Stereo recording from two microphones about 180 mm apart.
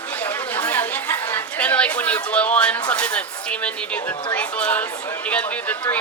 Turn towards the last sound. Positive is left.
turn(degrees=10)  # may be behind; listen again after turning